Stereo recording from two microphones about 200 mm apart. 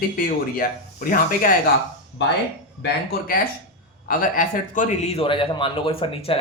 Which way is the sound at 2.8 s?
50° left (ahead or behind).